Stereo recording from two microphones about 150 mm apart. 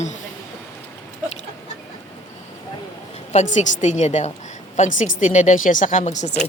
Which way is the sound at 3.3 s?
50° left (ahead or behind).